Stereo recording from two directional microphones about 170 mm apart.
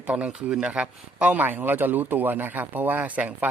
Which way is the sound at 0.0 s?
5° right (ahead or behind).